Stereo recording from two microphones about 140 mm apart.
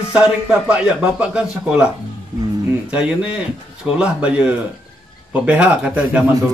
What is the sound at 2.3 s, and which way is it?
Speech, 30° right (ahead or behind).